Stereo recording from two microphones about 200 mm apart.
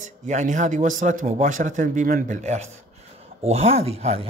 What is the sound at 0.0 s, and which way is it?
A man's voice, 40° right (ahead or behind).